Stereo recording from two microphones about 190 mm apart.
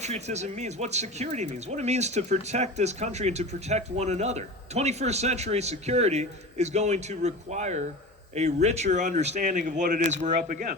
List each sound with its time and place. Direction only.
0.0 s speech: 35° right (ahead or behind)